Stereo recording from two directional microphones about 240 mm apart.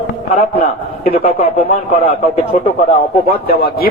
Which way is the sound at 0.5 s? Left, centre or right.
Left.